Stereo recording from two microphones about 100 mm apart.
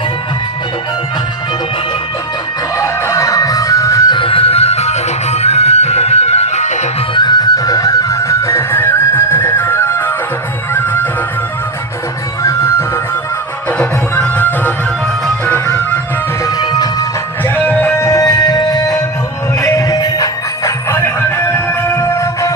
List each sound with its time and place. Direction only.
2.7 s music: 30° left (ahead or behind)
4.1 s music: 60° left (ahead or behind); by 6.5 s 90° left
7.1 s music: 45° left (ahead or behind); by 11.1 s 20° left (ahead or behind)
12.4 s music: 30° left (ahead or behind)
13.7 s music: 15° left (ahead or behind)
16.4 s music: 40° left (ahead or behind)
17.5 s music: 15° left (ahead or behind)
18.0 s music: 35° left (ahead or behind)